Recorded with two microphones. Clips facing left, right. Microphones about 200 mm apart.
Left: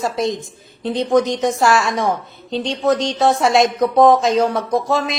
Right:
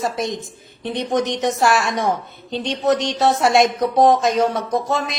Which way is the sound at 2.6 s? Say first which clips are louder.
Left 1 dB; 20° left (ahead or behind).